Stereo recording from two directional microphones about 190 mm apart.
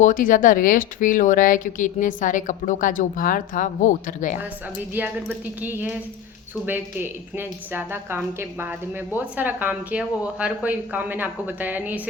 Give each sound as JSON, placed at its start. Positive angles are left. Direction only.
{"t": 0.0, "sound": "speech", "side_deg": 45}
{"t": 4.9, "sound": "speech", "side_deg": -10}